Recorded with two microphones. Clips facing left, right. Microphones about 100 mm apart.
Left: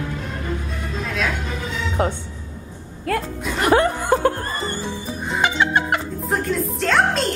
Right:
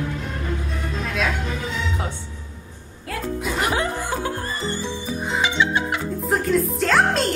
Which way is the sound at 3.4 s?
Centre (ahead or behind).